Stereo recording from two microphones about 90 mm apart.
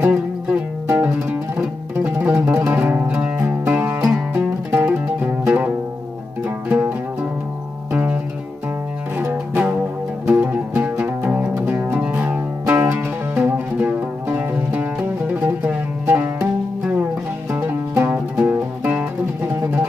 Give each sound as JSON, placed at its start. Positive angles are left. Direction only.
{"t": 0.0, "sound": "music", "side_deg": -10}
{"t": 7.9, "sound": "music", "side_deg": -25}
{"t": 9.2, "sound": "music", "side_deg": -25}
{"t": 17.5, "sound": "music", "side_deg": -20}